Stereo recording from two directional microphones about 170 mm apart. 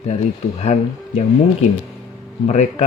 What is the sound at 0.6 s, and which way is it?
Speech, 40° left (ahead or behind).